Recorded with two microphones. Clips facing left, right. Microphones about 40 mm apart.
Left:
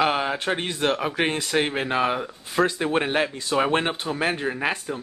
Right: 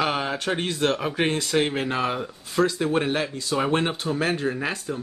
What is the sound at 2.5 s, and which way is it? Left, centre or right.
Speech, left.